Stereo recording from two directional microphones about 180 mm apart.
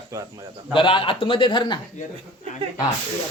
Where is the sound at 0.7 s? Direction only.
30° left (ahead or behind).